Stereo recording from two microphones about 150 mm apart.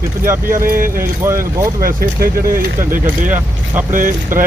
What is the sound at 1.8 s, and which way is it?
Speech, 90° right.